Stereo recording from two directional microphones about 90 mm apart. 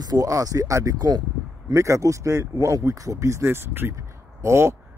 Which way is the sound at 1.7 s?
35° right (ahead or behind).